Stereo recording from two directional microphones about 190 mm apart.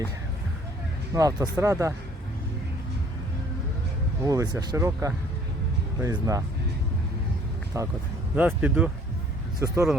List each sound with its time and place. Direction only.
1.1 s speech: 20° right (ahead or behind)
4.3 s speech: 15° right (ahead or behind)
7.7 s speech: 15° right (ahead or behind)